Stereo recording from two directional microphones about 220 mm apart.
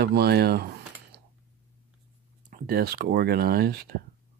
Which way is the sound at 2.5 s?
40° right (ahead or behind).